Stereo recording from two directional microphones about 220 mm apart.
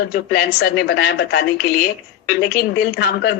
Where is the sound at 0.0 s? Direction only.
45° left (ahead or behind).